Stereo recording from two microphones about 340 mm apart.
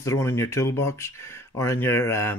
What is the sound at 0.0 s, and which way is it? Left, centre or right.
Speech, centre.